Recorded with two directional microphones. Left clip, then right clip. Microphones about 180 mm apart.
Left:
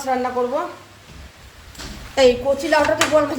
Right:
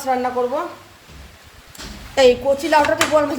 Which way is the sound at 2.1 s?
20° right (ahead or behind).